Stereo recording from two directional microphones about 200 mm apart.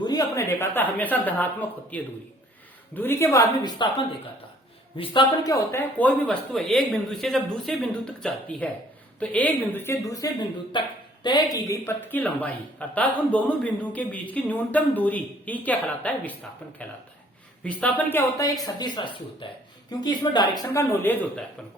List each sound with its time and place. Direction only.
0.0 s speech: 20° left (ahead or behind)